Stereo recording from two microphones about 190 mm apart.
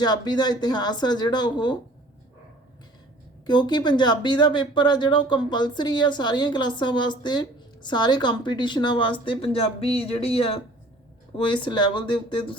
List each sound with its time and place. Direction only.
0.0 s speech: 20° left (ahead or behind)
3.4 s speech: 20° left (ahead or behind)